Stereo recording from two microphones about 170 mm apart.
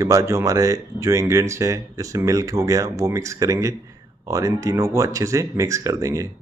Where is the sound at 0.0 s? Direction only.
20° right (ahead or behind).